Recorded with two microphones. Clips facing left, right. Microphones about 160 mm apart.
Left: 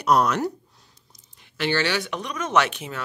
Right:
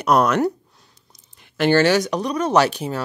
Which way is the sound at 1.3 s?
50° right (ahead or behind).